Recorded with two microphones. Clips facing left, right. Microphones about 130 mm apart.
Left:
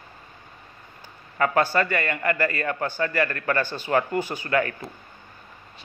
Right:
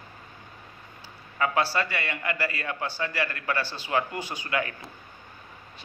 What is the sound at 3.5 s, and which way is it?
Speech, 50° left (ahead or behind).